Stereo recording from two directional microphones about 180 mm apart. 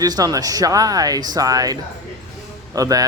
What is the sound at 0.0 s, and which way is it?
Speech, 20° right (ahead or behind).